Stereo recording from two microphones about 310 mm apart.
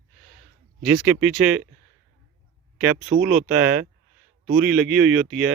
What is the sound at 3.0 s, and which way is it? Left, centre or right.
Speech, right.